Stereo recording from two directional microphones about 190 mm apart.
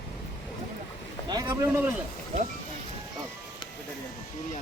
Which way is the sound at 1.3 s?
15° right (ahead or behind).